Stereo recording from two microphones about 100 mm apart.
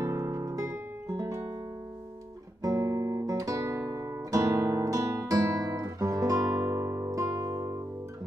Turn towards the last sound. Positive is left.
turn(degrees=-30)  # may be behind; listen again after turning